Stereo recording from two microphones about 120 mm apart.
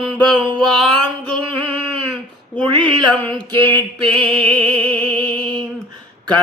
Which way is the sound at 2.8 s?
10° left (ahead or behind).